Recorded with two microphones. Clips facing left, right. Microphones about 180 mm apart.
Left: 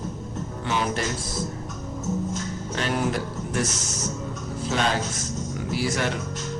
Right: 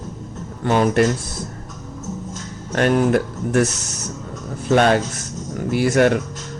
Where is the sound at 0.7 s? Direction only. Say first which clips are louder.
Right 10 dB; 50° right (ahead or behind).